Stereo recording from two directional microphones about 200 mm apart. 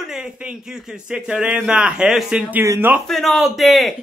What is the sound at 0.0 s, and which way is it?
Speech, 5° right (ahead or behind).